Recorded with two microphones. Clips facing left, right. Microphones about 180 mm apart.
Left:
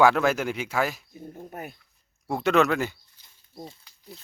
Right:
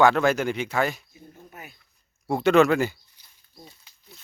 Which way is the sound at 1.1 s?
50° left (ahead or behind).